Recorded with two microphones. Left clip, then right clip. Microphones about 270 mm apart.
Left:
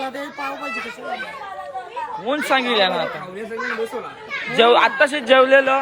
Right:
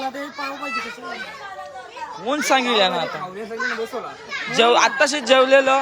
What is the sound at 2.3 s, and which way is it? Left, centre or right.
Speech, centre.